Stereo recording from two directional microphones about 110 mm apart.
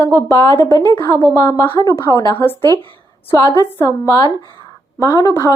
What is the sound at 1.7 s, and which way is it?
Speech, 35° left (ahead or behind).